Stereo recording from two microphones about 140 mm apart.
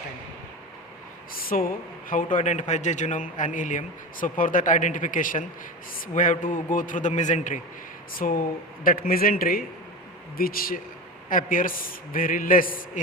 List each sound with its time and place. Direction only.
1.3 s a sound: 90° left
2.0 s a man's voice: 70° left (ahead or behind)
8.1 s a man's voice: 90° left
11.3 s a man's voice: 75° left (ahead or behind)